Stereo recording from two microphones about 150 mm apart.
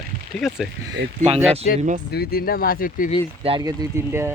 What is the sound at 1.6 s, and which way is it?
Speech, 60° left (ahead or behind).